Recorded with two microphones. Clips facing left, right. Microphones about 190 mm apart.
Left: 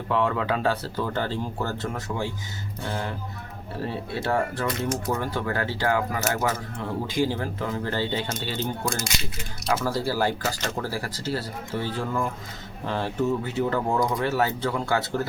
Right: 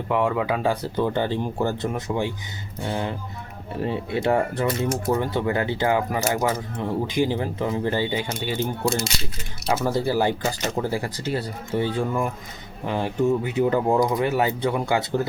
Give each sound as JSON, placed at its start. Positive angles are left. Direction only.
{"t": 0.1, "sound": "speech", "side_deg": -15}